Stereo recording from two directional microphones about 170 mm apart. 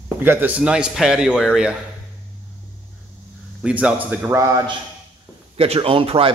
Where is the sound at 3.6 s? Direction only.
10° right (ahead or behind).